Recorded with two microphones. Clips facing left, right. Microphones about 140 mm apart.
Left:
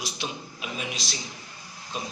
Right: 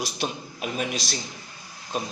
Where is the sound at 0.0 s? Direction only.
45° right (ahead or behind).